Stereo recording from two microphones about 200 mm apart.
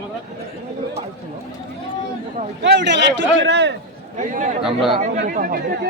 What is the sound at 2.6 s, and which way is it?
A man's voice, 60° right (ahead or behind).